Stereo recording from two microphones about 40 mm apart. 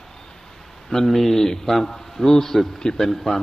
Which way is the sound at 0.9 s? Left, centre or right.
Centre.